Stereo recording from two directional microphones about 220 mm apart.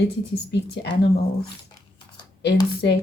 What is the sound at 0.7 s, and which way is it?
Speech, 50° left (ahead or behind).